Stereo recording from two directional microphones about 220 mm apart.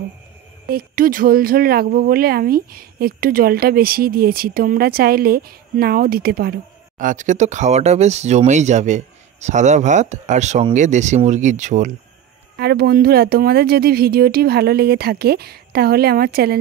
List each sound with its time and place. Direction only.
0.7 s speech: 40° right (ahead or behind)
12.5 s speech: 45° right (ahead or behind)